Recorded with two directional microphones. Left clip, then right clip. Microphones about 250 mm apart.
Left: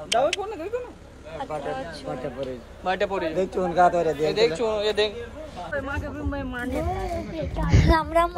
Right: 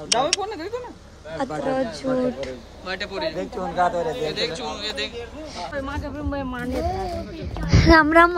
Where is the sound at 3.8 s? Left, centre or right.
Left.